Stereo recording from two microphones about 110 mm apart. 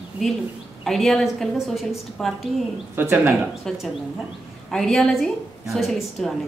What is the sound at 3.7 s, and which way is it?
A woman's voice, centre (ahead or behind).